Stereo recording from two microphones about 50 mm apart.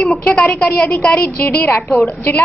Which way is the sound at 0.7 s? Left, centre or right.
Left.